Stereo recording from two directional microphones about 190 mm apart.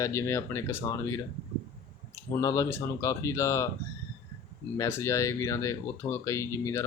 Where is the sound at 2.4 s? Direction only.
20° left (ahead or behind).